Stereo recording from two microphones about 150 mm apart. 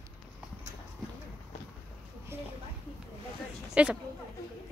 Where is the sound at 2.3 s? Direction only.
15° right (ahead or behind).